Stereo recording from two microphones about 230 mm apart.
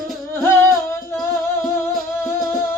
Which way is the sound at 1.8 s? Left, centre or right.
Centre.